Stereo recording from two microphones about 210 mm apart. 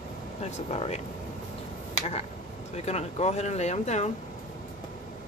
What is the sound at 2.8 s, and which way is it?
Speech, 30° left (ahead or behind).